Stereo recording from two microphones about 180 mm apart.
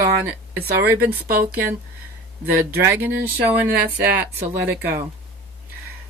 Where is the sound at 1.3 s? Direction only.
55° right (ahead or behind).